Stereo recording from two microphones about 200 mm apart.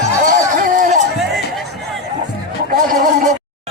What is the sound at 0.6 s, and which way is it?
Run, 40° right (ahead or behind).